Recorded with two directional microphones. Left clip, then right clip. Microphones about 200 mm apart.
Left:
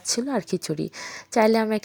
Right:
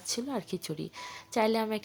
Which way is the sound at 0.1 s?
35° left (ahead or behind).